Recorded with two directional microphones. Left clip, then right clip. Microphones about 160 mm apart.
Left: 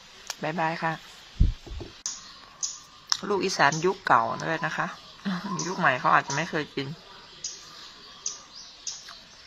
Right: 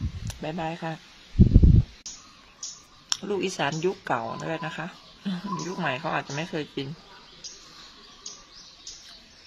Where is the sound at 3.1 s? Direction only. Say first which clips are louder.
Left 2 dB; 20° right (ahead or behind).